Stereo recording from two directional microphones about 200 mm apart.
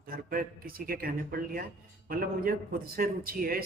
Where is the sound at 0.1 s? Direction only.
45° right (ahead or behind).